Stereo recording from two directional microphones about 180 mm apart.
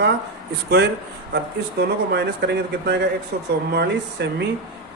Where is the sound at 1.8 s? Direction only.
65° right (ahead or behind).